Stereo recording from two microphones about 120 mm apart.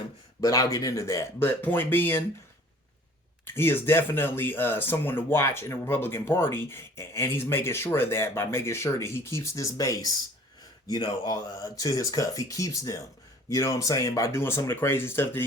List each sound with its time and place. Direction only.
0.4 s speech: 30° left (ahead or behind)
3.4 s speech: 20° left (ahead or behind)